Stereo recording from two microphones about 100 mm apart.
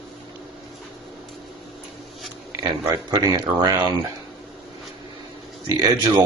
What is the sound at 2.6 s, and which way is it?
Speech, 35° right (ahead or behind).